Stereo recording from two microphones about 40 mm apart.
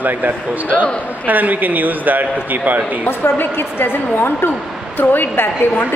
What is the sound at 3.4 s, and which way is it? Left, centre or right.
A woman's voice, left.